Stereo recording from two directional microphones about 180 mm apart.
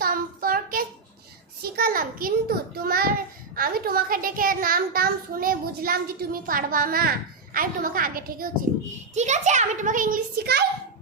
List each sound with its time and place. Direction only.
0.0 s child singing: 55° right (ahead or behind)
1.6 s a sound: 55° right (ahead or behind)
3.5 s a child's voice: 55° right (ahead or behind)
9.1 s a child's voice: 40° right (ahead or behind); by 10.6 s 60° right (ahead or behind)